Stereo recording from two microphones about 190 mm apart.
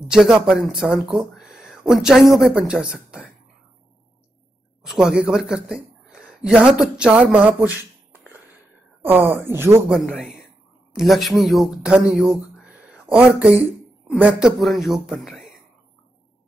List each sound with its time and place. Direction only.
0.1 s speech: 5° right (ahead or behind)
4.8 s a man's voice: centre (ahead or behind)